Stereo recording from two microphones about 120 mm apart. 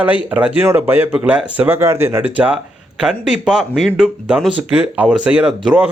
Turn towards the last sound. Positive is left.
turn(degrees=-10)  # may be behind; listen again after turning